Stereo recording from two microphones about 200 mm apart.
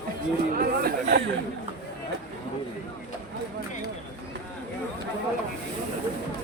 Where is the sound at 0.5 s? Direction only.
50° right (ahead or behind).